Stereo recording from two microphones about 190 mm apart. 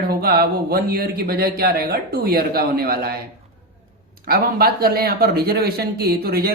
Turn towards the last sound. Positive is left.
turn(degrees=-55)  # may be behind; listen again after turning